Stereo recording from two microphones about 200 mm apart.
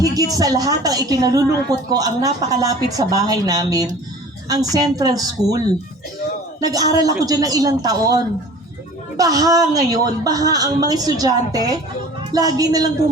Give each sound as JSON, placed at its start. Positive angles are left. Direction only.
{"t": 0.0, "sound": "a woman's voice", "side_deg": -20}